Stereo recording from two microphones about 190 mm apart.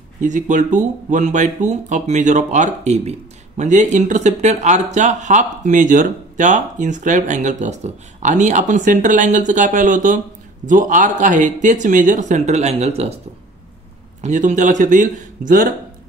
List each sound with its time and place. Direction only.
0.2 s speech: 40° right (ahead or behind)
14.2 s speech: 40° right (ahead or behind)